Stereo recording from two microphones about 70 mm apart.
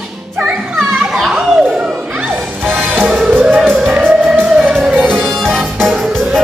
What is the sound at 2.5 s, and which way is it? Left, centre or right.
Music, right.